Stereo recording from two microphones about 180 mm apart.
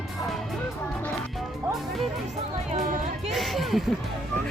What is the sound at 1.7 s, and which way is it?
Music, centre (ahead or behind).